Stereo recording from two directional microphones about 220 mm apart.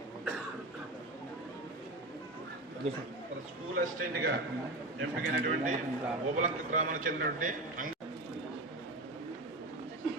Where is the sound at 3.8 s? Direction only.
45° right (ahead or behind).